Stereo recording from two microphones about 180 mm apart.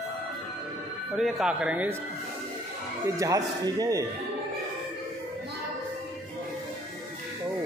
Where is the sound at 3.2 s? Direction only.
20° right (ahead or behind).